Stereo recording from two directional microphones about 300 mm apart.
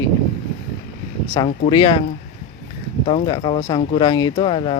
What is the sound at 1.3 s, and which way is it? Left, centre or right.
Speech, centre.